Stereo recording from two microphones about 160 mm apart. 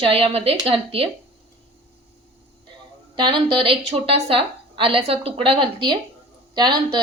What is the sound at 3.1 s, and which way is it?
A woman's voice, 30° right (ahead or behind).